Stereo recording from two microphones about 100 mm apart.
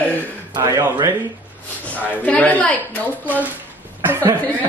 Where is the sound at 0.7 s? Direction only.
45° right (ahead or behind).